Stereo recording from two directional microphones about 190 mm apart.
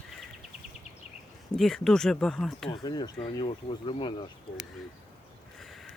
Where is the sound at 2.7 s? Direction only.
20° left (ahead or behind).